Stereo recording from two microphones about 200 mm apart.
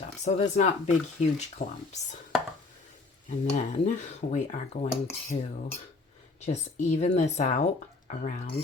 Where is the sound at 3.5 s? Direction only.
35° left (ahead or behind).